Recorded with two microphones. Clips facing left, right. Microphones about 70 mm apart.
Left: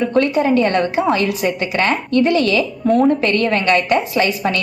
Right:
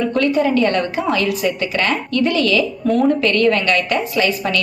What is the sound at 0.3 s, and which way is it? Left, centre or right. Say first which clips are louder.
A woman's voice: left 1 dB; left.